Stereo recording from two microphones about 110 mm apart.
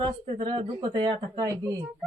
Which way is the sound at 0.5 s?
45° right (ahead or behind).